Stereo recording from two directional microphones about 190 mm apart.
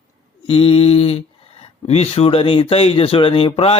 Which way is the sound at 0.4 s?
30° left (ahead or behind).